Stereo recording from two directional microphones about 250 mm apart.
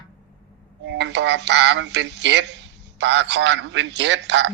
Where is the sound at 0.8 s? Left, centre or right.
Right.